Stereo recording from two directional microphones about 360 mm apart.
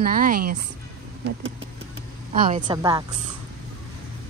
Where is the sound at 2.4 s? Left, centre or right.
Centre.